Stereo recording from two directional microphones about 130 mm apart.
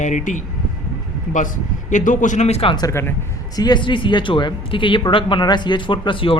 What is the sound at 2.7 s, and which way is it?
Speech, 25° left (ahead or behind).